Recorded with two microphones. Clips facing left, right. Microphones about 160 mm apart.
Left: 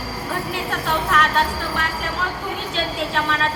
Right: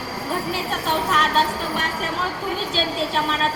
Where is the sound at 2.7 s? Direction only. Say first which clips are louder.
Left 1 dB; 30° right (ahead or behind).